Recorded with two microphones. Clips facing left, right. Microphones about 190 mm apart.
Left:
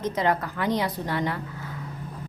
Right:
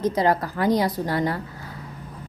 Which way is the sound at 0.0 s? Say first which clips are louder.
Right 4 dB; 35° right (ahead or behind).